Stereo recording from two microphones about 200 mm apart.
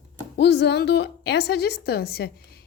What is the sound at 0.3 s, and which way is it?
A woman's voice, 60° left (ahead or behind).